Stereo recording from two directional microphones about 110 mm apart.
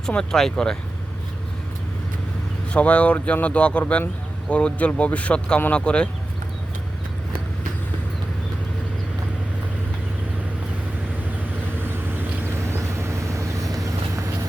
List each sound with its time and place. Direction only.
0.0 s speech: 5° left (ahead or behind)
2.7 s speech: 10° left (ahead or behind)
11.8 s vehicle: 20° right (ahead or behind)